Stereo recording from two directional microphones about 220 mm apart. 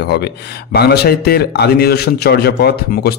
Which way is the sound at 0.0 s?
50° left (ahead or behind).